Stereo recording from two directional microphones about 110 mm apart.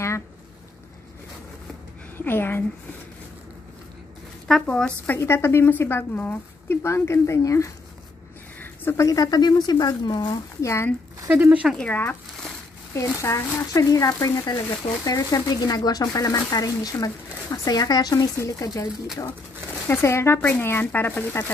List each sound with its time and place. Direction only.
2.1 s speech: 20° left (ahead or behind)
4.5 s speech: 5° left (ahead or behind); by 10.9 s 25° left (ahead or behind)
11.2 s speech: 15° right (ahead or behind)
11.7 s speech: 15° left (ahead or behind); by 18.9 s 30° left (ahead or behind)
19.9 s speech: 20° left (ahead or behind)